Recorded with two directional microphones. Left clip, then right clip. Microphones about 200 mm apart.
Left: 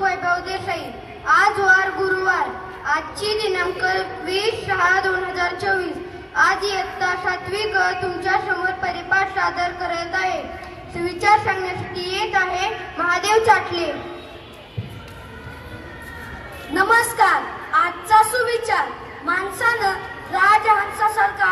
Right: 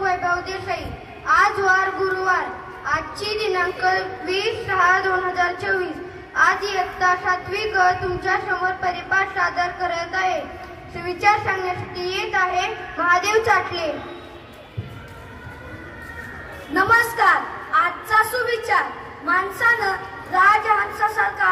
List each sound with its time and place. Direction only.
0.0 s a sound: 30° right (ahead or behind)
7.8 s a woman's voice: 30° right (ahead or behind)
16.7 s a woman's voice: 35° right (ahead or behind)